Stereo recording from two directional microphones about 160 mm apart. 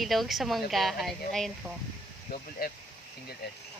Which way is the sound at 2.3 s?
65° left (ahead or behind).